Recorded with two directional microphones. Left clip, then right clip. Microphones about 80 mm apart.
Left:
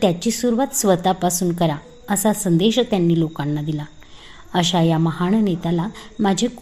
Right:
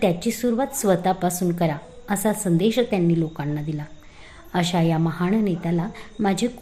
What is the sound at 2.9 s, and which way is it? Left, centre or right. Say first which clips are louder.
Speech: left 3 dB; left.